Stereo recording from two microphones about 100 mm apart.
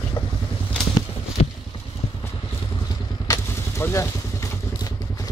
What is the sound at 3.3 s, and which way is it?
Vehicle, 30° left (ahead or behind).